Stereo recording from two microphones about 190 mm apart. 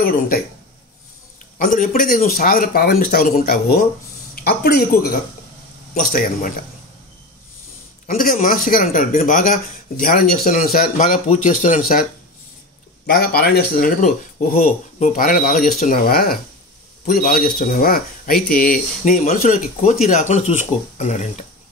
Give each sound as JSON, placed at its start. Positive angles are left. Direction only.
{"t": 0.0, "sound": "speech", "side_deg": 50}
{"t": 1.6, "sound": "speech", "side_deg": 45}
{"t": 8.1, "sound": "speech", "side_deg": 45}
{"t": 13.0, "sound": "speech", "side_deg": 55}